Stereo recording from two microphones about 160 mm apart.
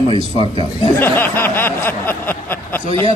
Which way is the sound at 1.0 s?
15° left (ahead or behind).